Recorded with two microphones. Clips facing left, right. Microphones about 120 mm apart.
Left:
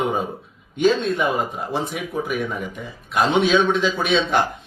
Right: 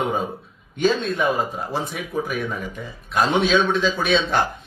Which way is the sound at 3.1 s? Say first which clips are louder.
Left 1 dB; 15° left (ahead or behind).